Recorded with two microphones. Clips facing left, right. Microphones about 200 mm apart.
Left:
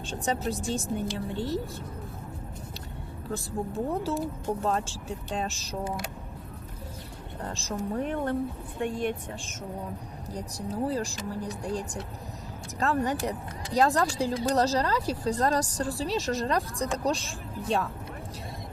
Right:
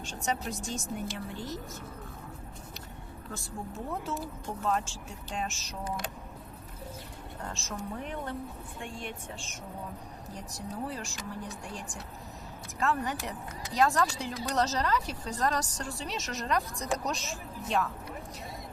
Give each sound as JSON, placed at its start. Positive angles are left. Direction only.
{"t": 0.4, "sound": "a woman's voice", "side_deg": 35}
{"t": 3.3, "sound": "a woman's voice", "side_deg": 35}
{"t": 7.4, "sound": "a woman's voice", "side_deg": 35}
{"t": 8.1, "sound": "speech", "side_deg": 55}
{"t": 10.3, "sound": "a woman's voice", "side_deg": 35}